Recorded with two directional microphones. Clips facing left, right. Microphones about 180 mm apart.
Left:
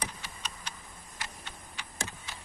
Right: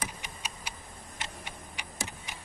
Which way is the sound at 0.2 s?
10° right (ahead or behind).